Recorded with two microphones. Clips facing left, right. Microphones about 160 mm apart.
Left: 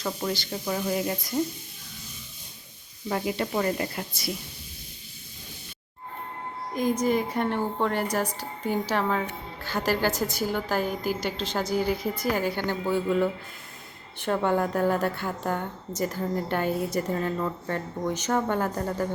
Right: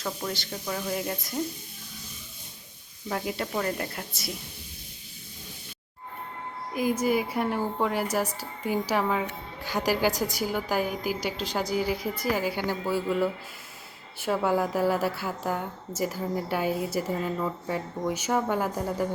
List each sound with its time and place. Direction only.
0.0 s a woman's voice: 5° left (ahead or behind)
3.1 s a woman's voice: centre (ahead or behind)
6.7 s a woman's voice: 5° right (ahead or behind)